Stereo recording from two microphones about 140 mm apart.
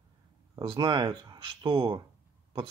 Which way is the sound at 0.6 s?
30° right (ahead or behind).